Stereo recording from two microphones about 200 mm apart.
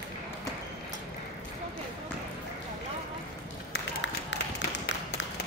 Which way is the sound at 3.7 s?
60° left (ahead or behind).